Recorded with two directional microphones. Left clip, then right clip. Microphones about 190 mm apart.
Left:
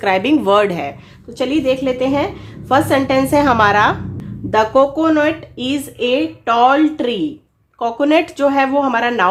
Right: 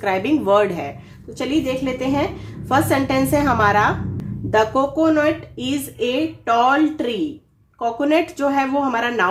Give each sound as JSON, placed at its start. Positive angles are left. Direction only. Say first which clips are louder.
{"t": 0.0, "sound": "a woman's voice", "louder": "left 5 dB", "side_deg": 40}